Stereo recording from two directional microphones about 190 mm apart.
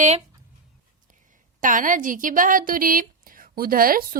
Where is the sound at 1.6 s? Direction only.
45° right (ahead or behind).